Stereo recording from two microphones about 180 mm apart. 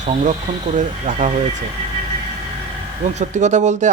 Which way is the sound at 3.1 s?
40° right (ahead or behind).